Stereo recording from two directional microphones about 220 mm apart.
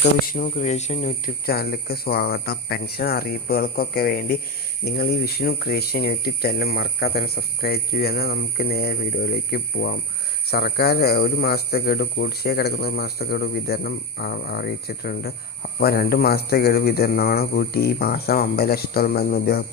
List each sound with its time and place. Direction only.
0.0 s speech: 35° left (ahead or behind)
1.5 s speech: 45° left (ahead or behind)